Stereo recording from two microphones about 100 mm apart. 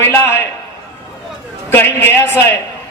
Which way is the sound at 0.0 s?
25° left (ahead or behind).